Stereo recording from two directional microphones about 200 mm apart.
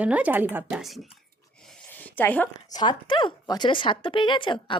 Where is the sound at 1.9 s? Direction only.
10° left (ahead or behind).